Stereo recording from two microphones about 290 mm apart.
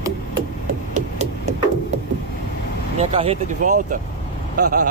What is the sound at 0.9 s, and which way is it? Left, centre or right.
Hammer, right.